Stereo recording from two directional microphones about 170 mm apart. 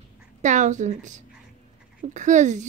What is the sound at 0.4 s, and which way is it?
Speech, 45° right (ahead or behind).